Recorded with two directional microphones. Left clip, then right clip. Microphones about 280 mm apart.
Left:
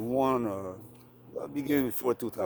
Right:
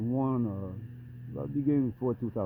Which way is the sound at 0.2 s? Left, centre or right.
Centre.